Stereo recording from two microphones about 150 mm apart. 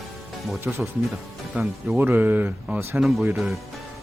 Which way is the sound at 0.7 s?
10° right (ahead or behind).